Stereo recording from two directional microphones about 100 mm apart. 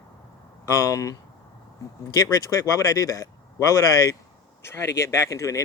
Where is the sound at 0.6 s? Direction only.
35° left (ahead or behind).